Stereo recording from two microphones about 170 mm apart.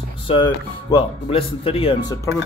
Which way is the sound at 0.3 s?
25° left (ahead or behind).